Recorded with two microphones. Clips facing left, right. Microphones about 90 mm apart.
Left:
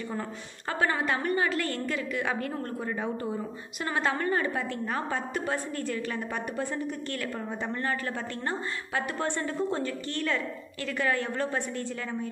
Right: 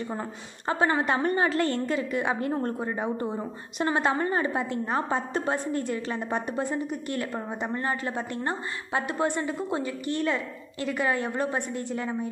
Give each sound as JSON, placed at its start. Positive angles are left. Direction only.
{"t": 0.7, "sound": "a woman's voice", "side_deg": -25}
{"t": 9.3, "sound": "a woman's voice", "side_deg": -10}